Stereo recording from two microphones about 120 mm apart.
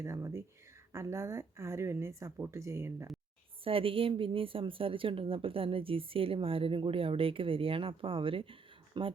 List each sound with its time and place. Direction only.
0.0 s a woman's voice: 25° right (ahead or behind)
3.6 s speech: 50° right (ahead or behind)